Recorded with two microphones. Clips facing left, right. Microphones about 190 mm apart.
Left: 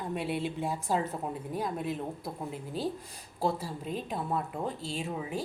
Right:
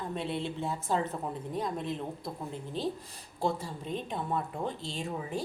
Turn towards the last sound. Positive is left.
turn(degrees=5)  # may be behind; listen again after turning